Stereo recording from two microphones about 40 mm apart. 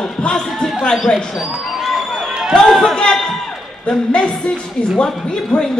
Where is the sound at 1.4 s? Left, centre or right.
Centre.